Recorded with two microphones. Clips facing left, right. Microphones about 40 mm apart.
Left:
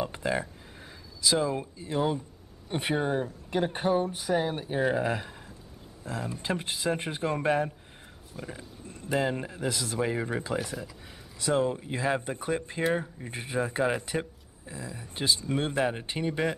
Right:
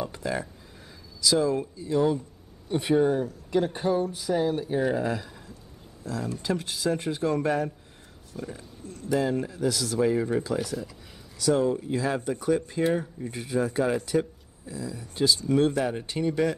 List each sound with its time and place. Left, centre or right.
0.0 s speech: left